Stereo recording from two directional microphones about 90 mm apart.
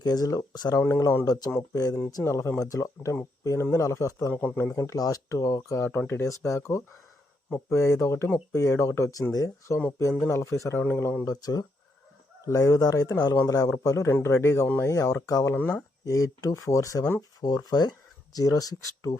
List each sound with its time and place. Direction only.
0.0 s speech: 45° left (ahead or behind)
2.2 s speech: 30° left (ahead or behind)
4.3 s speech: 20° left (ahead or behind)
4.7 s speech: 35° left (ahead or behind)
10.0 s speech: 30° left (ahead or behind)
11.3 s speech: 45° left (ahead or behind)
15.5 s speech: 20° left (ahead or behind)
16.0 s speech: 40° left (ahead or behind)